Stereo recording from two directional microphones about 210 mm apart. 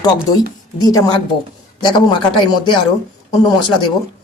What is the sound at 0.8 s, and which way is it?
Speech, 20° left (ahead or behind).